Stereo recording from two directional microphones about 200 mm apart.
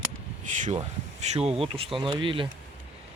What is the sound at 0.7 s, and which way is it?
Speech, 35° right (ahead or behind).